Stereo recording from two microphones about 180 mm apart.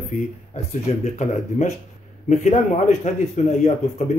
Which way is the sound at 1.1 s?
40° left (ahead or behind).